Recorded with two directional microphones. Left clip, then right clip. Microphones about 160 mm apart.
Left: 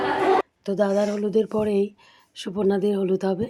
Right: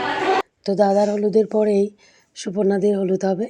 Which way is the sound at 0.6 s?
20° right (ahead or behind).